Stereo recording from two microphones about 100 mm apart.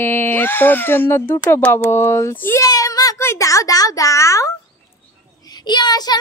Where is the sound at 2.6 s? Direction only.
40° left (ahead or behind).